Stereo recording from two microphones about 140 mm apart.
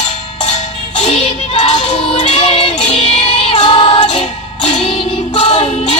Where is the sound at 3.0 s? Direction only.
35° left (ahead or behind).